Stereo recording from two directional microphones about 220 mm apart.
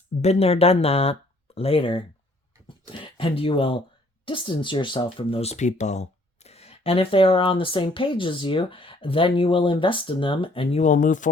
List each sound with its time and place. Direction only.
0.2 s speech: 30° left (ahead or behind)